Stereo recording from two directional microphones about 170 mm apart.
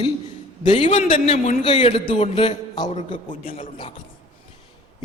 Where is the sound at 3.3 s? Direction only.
55° left (ahead or behind).